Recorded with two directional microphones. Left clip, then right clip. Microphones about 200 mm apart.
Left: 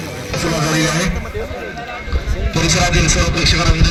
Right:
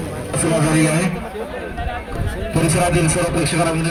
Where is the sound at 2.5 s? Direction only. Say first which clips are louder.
Left 2 dB; 35° right (ahead or behind).